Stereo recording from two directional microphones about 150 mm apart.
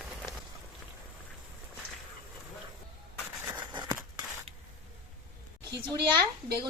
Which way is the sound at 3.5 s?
30° right (ahead or behind).